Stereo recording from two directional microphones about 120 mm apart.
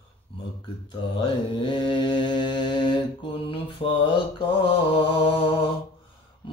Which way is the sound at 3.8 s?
55° left (ahead or behind).